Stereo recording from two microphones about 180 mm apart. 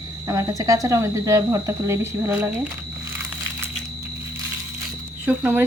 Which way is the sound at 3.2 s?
15° right (ahead or behind).